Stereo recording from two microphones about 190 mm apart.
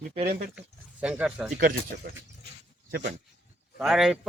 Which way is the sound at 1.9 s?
60° right (ahead or behind).